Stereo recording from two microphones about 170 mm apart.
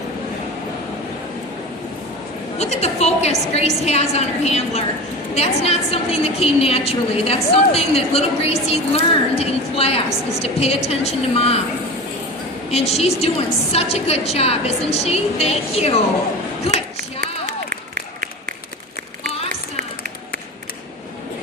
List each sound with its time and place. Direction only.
2.6 s a woman's voice: 40° left (ahead or behind)
12.7 s a woman's voice: 35° left (ahead or behind)